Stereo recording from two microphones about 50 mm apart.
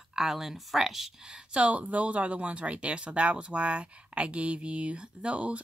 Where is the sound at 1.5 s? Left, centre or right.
Right.